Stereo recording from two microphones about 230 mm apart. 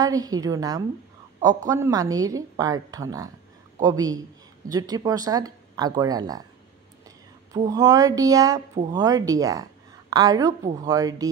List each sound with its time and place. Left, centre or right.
0.0 s speech: centre
7.5 s a woman's voice: centre